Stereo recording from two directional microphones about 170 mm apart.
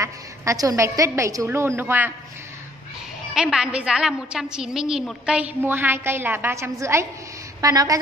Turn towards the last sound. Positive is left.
turn(degrees=-20)  # may be behind; listen again after turning